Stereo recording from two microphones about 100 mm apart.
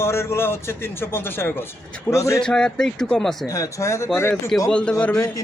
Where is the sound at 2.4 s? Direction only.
10° left (ahead or behind).